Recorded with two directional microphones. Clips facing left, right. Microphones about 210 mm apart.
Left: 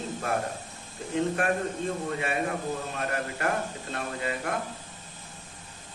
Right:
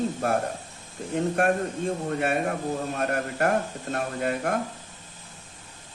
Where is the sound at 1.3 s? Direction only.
45° right (ahead or behind).